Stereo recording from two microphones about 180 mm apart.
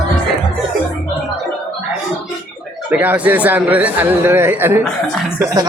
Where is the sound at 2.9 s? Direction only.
10° right (ahead or behind).